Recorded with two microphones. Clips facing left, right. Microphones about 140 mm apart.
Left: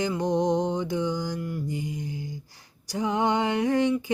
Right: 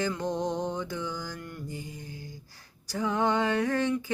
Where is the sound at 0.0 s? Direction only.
15° left (ahead or behind).